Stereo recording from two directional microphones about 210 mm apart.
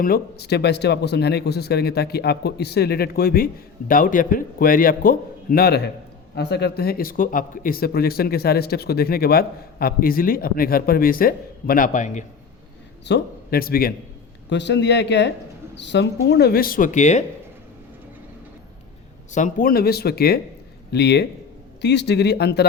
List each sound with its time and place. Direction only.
0.0 s speech: 45° left (ahead or behind)
13.1 s speech: 50° left (ahead or behind)
14.5 s speech: 55° left (ahead or behind); by 17.2 s 35° left (ahead or behind)
19.3 s speech: 40° left (ahead or behind)